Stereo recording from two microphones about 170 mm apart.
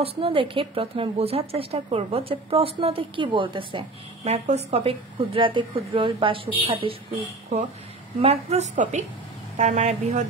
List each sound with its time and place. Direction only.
0.0 s a woman's voice: 30° right (ahead or behind)
8.2 s a woman's voice: 35° right (ahead or behind)